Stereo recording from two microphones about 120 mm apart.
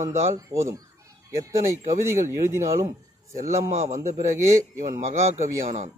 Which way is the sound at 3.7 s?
65° right (ahead or behind).